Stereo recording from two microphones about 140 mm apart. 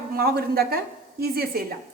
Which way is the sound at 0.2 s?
90° right.